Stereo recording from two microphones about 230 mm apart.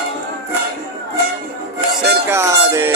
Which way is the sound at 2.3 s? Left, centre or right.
Centre.